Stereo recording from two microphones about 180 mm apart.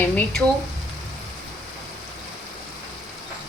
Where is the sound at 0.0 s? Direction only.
10° left (ahead or behind).